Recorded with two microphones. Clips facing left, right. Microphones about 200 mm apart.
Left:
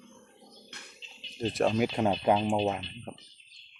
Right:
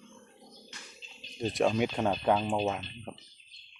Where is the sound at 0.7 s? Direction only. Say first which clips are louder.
Even; 60° left (ahead or behind).